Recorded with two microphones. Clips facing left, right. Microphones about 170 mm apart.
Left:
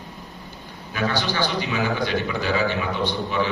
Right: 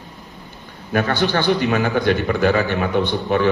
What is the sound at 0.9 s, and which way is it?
A man's voice, 55° right (ahead or behind).